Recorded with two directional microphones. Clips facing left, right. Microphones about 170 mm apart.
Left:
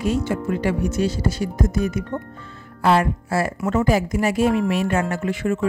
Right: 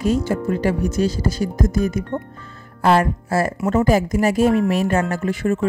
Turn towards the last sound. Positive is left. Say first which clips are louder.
# right 2 dB
turn(degrees=-40)  # may be behind; listen again after turning